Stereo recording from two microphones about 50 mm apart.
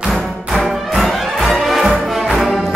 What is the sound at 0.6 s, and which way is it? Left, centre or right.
Music, centre.